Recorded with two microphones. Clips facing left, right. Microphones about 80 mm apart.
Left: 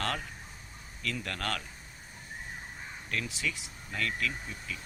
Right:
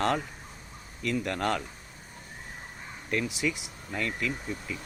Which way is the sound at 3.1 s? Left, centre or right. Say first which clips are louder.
Right 6 dB; centre.